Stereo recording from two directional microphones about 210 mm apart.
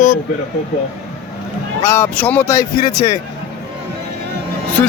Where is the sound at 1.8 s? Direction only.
10° left (ahead or behind).